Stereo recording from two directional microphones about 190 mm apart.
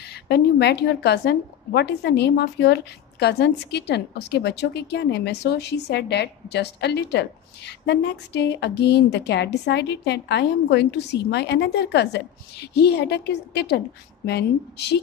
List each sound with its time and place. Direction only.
0.1 s a woman's voice: 60° left (ahead or behind)